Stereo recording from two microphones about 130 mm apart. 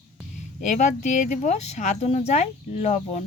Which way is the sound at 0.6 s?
65° left (ahead or behind).